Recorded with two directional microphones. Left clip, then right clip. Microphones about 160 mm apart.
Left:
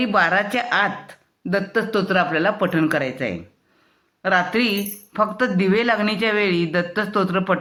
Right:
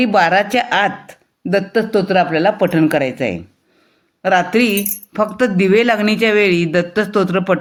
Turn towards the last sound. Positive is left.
turn(degrees=-40)  # may be behind; listen again after turning